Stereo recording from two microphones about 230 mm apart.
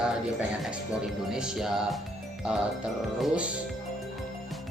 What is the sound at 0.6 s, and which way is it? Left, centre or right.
Speech, centre.